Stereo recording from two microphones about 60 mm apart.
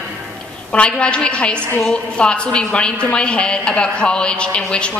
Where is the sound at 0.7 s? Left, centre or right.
Centre.